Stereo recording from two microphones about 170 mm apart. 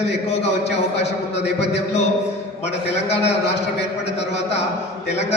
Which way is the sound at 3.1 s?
40° left (ahead or behind).